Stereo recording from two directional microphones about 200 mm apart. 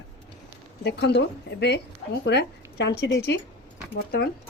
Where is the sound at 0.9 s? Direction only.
55° left (ahead or behind).